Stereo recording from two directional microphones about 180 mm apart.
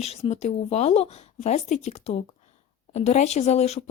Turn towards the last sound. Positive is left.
turn(degrees=35)  # may be behind; listen again after turning